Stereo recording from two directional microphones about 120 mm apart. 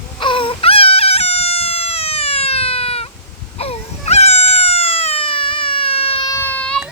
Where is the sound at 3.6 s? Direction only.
60° left (ahead or behind).